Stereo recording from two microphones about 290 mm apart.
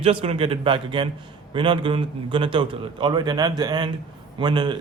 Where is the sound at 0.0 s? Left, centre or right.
Right.